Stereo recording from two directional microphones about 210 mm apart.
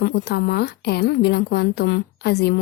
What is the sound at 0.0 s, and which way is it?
A woman's voice, 55° left (ahead or behind).